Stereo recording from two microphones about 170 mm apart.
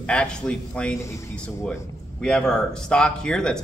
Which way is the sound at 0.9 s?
15° left (ahead or behind).